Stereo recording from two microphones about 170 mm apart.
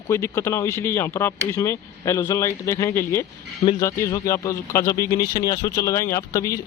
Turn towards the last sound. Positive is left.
turn(degrees=20)  # may be behind; listen again after turning